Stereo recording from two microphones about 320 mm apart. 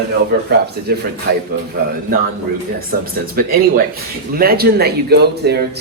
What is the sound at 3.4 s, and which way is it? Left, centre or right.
Speech, right.